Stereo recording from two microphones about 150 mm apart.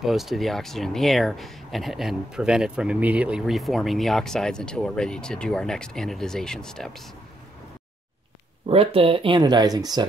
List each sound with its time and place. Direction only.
0.0 s speech: centre (ahead or behind)
8.6 s speech: 40° right (ahead or behind)